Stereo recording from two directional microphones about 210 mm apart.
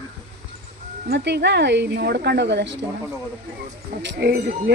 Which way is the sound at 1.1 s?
55° right (ahead or behind).